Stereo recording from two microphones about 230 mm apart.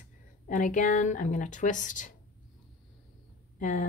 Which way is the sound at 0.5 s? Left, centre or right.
Left.